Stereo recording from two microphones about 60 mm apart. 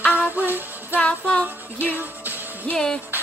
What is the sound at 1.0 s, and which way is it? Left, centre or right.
Music, left.